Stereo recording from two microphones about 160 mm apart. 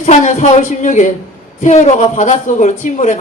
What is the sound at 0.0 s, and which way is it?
A woman's voice, 50° left (ahead or behind).